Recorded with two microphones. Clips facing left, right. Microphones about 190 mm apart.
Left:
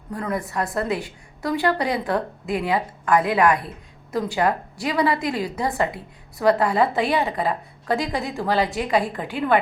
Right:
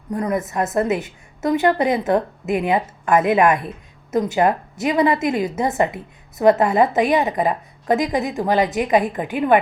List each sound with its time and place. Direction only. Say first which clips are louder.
0.1 s a woman's voice: right 5 dB; 20° right (ahead or behind)